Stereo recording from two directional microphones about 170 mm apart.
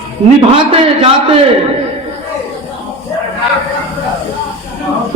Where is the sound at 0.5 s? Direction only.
35° right (ahead or behind).